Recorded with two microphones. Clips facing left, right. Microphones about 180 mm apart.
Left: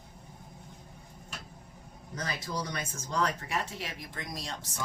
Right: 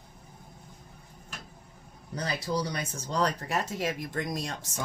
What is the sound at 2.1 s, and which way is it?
Speech, 35° right (ahead or behind).